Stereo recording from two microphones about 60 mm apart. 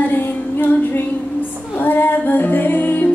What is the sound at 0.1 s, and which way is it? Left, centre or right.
Music, left.